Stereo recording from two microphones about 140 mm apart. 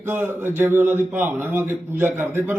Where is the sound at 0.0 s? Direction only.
15° right (ahead or behind).